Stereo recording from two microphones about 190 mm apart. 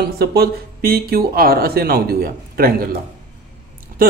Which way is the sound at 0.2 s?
55° right (ahead or behind).